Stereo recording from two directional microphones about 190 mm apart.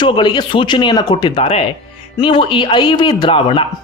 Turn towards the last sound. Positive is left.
turn(degrees=25)  # may be behind; listen again after turning